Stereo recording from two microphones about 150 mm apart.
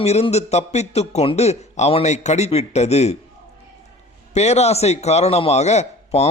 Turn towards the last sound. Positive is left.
turn(degrees=45)  # may be behind; listen again after turning